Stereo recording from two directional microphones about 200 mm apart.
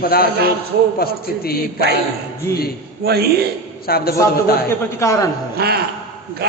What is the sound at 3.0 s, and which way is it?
Speech, 50° right (ahead or behind).